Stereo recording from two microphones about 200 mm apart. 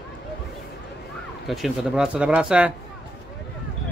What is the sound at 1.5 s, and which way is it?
Speech, centre (ahead or behind).